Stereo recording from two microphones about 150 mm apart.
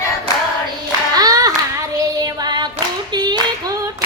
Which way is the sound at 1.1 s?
25° right (ahead or behind).